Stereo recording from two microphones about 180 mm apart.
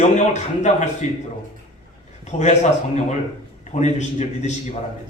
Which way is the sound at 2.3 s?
40° left (ahead or behind).